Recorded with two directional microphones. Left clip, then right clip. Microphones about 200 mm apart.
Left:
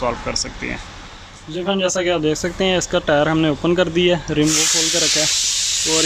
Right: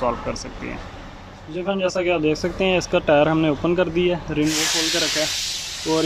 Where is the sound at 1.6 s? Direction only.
5° right (ahead or behind).